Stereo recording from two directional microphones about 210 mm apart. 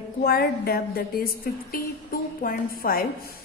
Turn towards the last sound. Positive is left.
turn(degrees=45)  # may be behind; listen again after turning